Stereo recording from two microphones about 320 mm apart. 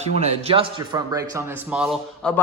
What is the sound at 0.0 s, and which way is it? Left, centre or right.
A man's voice, right.